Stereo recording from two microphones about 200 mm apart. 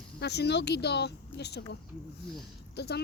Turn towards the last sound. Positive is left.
turn(degrees=55)  # may be behind; listen again after turning